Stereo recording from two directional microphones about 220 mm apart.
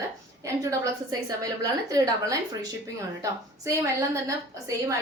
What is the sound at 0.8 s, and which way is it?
A woman's voice, 15° right (ahead or behind).